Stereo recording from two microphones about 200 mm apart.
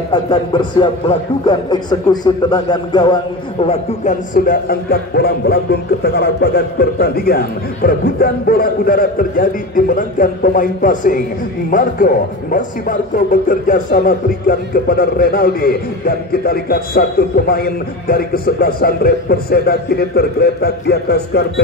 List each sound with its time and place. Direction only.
0.1 s a man's voice: 20° left (ahead or behind)
3.6 s a man's voice: 35° left (ahead or behind); by 21.5 s 55° left (ahead or behind)